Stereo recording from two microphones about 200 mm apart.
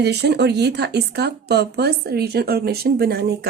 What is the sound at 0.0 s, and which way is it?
Speech, 55° right (ahead or behind).